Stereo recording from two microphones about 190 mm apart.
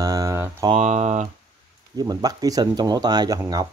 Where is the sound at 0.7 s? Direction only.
40° right (ahead or behind).